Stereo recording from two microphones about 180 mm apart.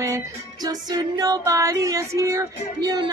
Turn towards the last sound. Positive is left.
turn(degrees=-20)  # may be behind; listen again after turning